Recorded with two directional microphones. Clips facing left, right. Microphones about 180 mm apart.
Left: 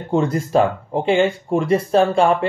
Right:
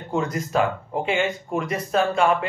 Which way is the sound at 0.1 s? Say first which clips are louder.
Left 6 dB; 30° left (ahead or behind).